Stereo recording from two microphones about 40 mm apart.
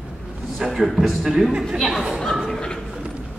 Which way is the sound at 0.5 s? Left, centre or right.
Centre.